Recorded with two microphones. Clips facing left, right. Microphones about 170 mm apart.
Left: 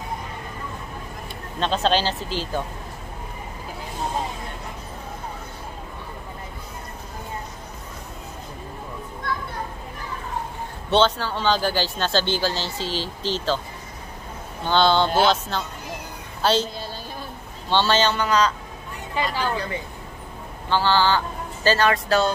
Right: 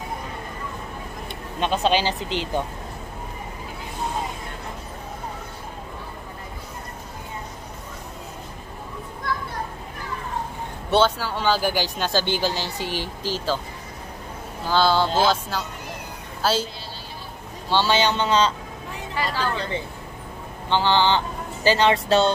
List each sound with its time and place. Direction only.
1.6 s speech: 15° right (ahead or behind)
10.9 s speech: 10° right (ahead or behind)
14.6 s speech: 5° right (ahead or behind)
17.6 s speech: 10° right (ahead or behind)
19.1 s speech: 15° left (ahead or behind)
20.7 s speech: 20° right (ahead or behind)